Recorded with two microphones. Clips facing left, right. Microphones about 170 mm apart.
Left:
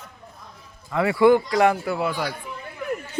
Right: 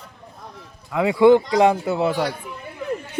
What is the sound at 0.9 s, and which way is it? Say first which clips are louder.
A man's voice: right 3 dB; 15° right (ahead or behind).